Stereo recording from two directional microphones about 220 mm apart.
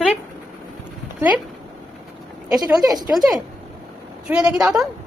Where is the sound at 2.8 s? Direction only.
15° right (ahead or behind).